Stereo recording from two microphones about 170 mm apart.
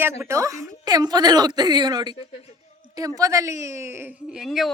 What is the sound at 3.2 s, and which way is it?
Speech, 20° right (ahead or behind).